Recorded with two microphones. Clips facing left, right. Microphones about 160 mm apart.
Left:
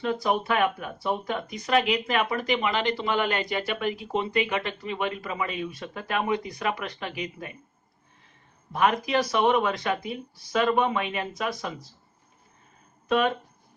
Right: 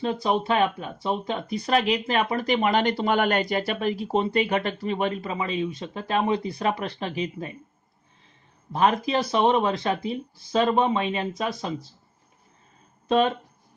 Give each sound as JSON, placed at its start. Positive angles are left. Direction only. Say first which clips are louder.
{"t": 0.0, "sound": "speech", "louder": "right 1 dB", "side_deg": -25}
{"t": 3.5, "sound": "speech", "louder": "right 3 dB", "side_deg": -35}
{"t": 8.7, "sound": "speech", "louder": "right 1 dB", "side_deg": -30}
{"t": 13.1, "sound": "speech", "louder": "right 2 dB", "side_deg": -30}